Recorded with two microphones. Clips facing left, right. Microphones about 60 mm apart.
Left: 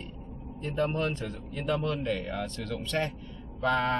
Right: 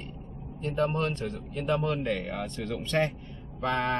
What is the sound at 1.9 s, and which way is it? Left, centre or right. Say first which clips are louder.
Speech: right 1 dB; right.